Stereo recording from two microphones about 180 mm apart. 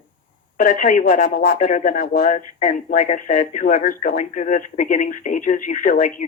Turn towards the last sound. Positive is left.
turn(degrees=45)  # may be behind; listen again after turning